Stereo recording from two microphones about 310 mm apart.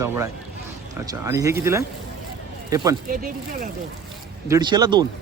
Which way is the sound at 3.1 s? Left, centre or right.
Right.